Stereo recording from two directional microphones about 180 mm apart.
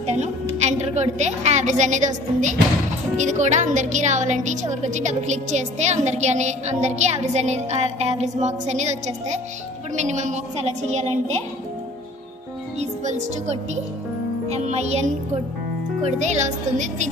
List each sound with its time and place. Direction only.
0.0 s a woman's voice: 40° right (ahead or behind)
12.7 s a woman's voice: 40° right (ahead or behind)